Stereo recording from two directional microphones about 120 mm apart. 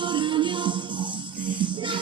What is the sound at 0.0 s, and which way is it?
Music, 40° right (ahead or behind).